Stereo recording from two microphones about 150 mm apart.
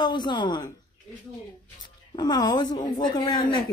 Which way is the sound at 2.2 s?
30° left (ahead or behind).